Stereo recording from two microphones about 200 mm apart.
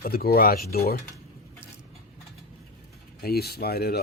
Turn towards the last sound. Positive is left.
turn(degrees=50)  # may be behind; listen again after turning